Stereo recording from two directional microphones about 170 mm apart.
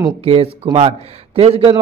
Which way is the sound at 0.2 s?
35° right (ahead or behind).